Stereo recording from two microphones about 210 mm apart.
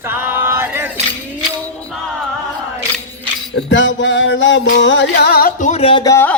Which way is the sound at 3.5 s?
60° left (ahead or behind).